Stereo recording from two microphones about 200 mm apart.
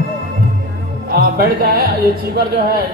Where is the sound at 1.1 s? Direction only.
50° right (ahead or behind).